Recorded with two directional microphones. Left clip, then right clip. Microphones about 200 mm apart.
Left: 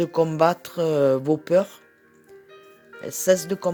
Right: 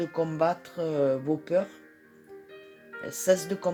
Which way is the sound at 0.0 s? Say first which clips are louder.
Left 7 dB; 50° left (ahead or behind).